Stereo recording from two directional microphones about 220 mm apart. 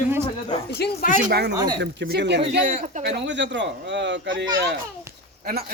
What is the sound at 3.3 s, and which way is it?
A man's voice, 55° right (ahead or behind).